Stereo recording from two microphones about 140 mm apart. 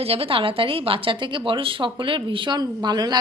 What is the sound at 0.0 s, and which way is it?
Speech, 45° right (ahead or behind).